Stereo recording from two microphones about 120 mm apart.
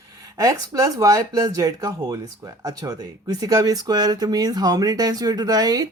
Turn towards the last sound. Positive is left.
turn(degrees=-30)  # may be behind; listen again after turning